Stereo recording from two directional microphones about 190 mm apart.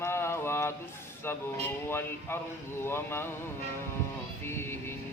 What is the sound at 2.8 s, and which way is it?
Speech, 10° left (ahead or behind).